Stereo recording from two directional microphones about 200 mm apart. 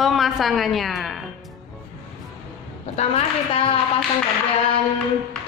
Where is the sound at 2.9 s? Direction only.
30° left (ahead or behind).